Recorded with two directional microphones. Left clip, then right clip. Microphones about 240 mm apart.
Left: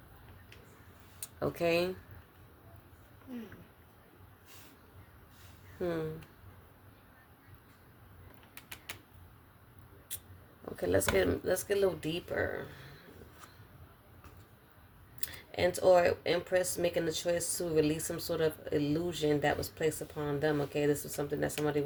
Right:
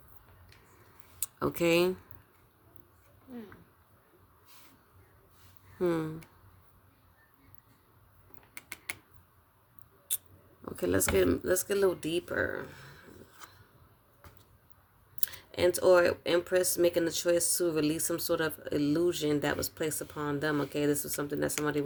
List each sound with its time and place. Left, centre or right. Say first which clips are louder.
1.2 s speech: right 3 dB; right
5.8 s speech: right 5 dB; right
10.8 s speech: right 1 dB; right
15.2 s speech: right 3 dB; right